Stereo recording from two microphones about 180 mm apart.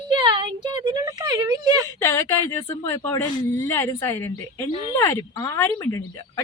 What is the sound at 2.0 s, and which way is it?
Speech, 15° left (ahead or behind).